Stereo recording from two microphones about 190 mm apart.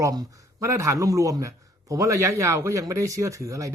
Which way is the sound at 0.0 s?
20° right (ahead or behind).